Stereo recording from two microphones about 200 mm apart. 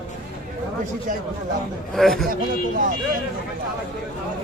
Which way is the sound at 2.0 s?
Centre (ahead or behind).